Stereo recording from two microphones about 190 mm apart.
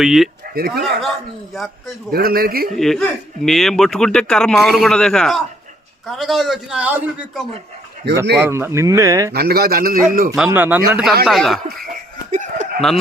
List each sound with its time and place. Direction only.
0.0 s speech: centre (ahead or behind)
0.5 s speech: 55° right (ahead or behind)
2.1 s a man's voice: 50° right (ahead or behind)
2.7 s speech: centre (ahead or behind)
8.1 s speech: 60° right (ahead or behind)
8.4 s speech: 10° right (ahead or behind)
9.3 s a man's voice: 55° right (ahead or behind)
10.3 s speech: 5° right (ahead or behind)
12.3 s a sound: 40° right (ahead or behind)